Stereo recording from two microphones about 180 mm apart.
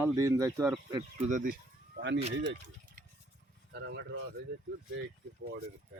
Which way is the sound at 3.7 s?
75° right (ahead or behind).